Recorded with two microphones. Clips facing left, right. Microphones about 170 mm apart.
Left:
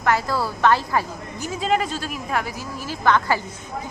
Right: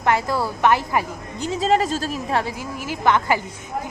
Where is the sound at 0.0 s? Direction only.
20° right (ahead or behind).